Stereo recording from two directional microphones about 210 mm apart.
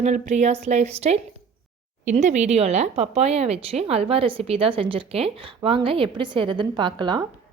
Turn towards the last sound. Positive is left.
turn(degrees=-20)  # may be behind; listen again after turning